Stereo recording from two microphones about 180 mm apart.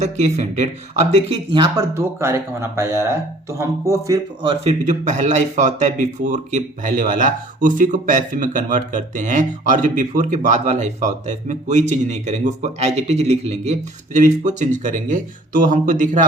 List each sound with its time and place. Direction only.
0.0 s a man's voice: 40° right (ahead or behind); by 4.5 s 20° right (ahead or behind)
4.6 s speech: 40° right (ahead or behind)